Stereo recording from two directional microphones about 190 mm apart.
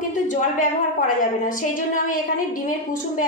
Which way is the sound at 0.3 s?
45° left (ahead or behind).